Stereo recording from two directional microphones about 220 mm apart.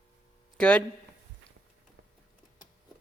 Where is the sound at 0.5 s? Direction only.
5° left (ahead or behind).